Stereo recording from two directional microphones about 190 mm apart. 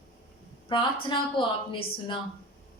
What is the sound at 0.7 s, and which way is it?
Speech, 25° left (ahead or behind).